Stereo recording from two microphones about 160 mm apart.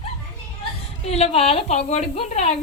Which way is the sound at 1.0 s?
40° left (ahead or behind).